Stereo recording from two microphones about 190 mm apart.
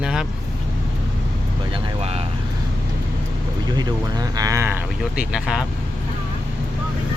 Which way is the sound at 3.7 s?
20° right (ahead or behind).